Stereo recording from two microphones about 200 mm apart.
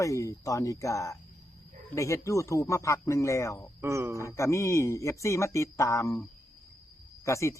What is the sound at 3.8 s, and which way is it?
Speech, 15° right (ahead or behind).